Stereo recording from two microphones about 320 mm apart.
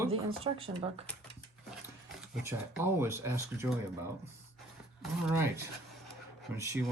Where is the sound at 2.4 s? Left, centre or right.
Centre.